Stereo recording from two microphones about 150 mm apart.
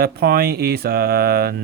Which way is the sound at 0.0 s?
90° right.